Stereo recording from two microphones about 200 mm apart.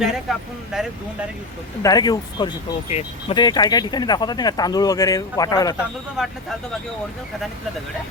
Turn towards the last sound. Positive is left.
turn(degrees=0)  # may be behind; listen again after turning